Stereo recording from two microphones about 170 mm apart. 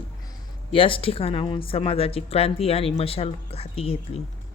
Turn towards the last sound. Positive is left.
turn(degrees=35)  # may be behind; listen again after turning